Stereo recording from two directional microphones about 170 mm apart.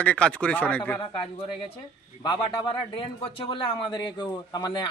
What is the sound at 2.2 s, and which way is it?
Speech, 25° left (ahead or behind).